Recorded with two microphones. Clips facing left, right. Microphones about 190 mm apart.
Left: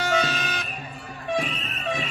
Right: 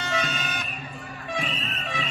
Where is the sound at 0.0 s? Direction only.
90° left.